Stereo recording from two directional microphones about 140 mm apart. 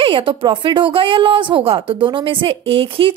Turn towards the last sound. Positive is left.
turn(degrees=-40)  # may be behind; listen again after turning